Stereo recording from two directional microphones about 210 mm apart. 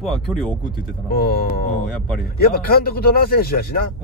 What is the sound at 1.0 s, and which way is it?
Speech, 45° left (ahead or behind).